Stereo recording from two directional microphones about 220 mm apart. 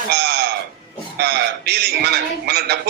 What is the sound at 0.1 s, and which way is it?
Music, 45° right (ahead or behind).